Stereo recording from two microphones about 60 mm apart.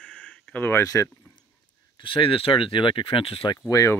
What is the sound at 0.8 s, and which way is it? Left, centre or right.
Speech, left.